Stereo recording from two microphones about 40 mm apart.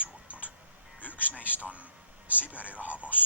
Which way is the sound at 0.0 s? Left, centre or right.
Right.